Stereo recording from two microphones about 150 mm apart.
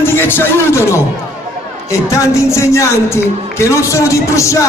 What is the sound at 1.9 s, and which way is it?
Speech, 20° left (ahead or behind).